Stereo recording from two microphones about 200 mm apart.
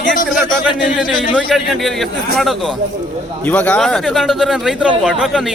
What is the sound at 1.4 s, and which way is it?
Speech, centre (ahead or behind).